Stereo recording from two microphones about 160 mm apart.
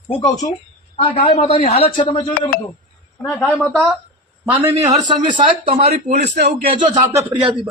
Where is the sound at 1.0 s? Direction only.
40° left (ahead or behind).